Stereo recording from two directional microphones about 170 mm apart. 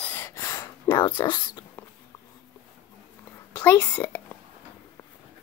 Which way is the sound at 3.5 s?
10° left (ahead or behind).